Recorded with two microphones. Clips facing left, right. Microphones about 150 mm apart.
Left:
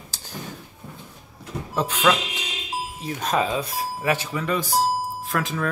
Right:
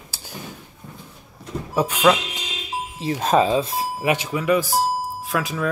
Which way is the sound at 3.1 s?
30° right (ahead or behind).